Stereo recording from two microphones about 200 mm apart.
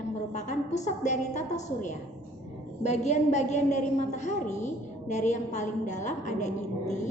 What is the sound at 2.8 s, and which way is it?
A woman's voice, 35° left (ahead or behind).